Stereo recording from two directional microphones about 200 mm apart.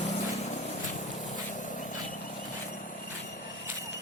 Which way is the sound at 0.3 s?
35° left (ahead or behind).